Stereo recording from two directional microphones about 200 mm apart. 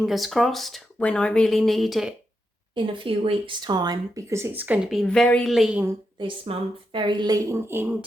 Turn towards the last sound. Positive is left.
turn(degrees=-10)  # may be behind; listen again after turning